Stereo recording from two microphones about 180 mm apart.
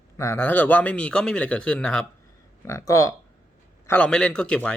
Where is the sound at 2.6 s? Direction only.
15° left (ahead or behind).